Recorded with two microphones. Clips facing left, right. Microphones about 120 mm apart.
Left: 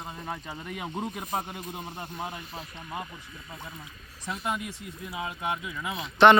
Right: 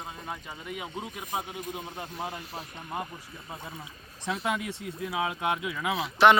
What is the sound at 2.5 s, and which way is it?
Speech, 40° right (ahead or behind).